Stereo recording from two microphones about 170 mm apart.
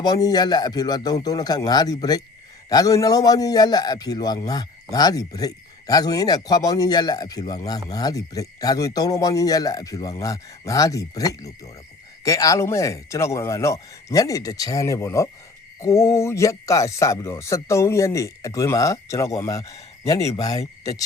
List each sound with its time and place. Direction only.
0.0 s a man's voice: 25° left (ahead or behind)